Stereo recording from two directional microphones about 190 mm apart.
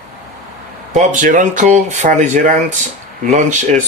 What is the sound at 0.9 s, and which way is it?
Speech, 40° right (ahead or behind).